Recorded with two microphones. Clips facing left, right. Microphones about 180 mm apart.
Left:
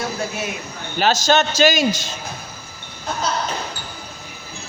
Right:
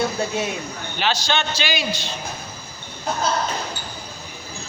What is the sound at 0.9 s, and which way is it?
A man's voice, 45° left (ahead or behind).